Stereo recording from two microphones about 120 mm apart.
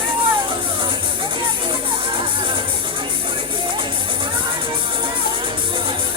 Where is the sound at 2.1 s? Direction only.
45° right (ahead or behind).